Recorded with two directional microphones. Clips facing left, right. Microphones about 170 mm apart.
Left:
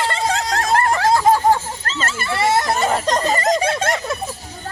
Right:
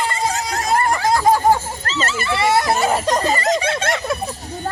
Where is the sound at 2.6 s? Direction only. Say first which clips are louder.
Right 1 dB; 5° right (ahead or behind).